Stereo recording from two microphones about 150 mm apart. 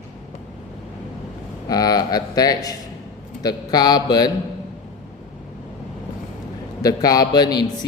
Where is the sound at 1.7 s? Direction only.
25° left (ahead or behind).